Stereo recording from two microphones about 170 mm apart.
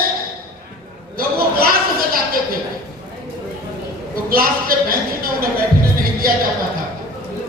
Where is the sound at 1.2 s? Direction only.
60° right (ahead or behind).